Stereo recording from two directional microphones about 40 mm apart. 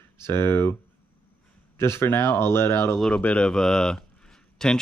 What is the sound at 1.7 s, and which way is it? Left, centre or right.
Speech, left.